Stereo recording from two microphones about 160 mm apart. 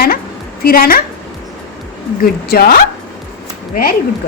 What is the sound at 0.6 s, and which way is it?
Speech, 65° left (ahead or behind).